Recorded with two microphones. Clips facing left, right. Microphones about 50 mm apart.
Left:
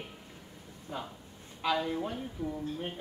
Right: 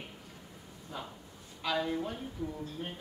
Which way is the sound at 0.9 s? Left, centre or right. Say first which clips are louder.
Left 3 dB; centre.